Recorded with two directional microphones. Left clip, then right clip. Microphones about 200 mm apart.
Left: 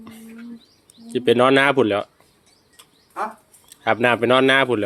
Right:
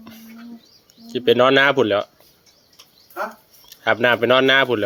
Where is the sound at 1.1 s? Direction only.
5° left (ahead or behind).